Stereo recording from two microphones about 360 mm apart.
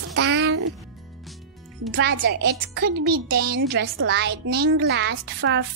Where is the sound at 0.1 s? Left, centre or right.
Right.